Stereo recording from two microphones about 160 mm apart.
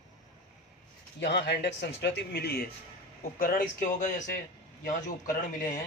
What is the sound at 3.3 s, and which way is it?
A man's voice, 55° left (ahead or behind).